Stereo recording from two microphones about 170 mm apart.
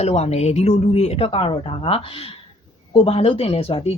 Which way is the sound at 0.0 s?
40° left (ahead or behind).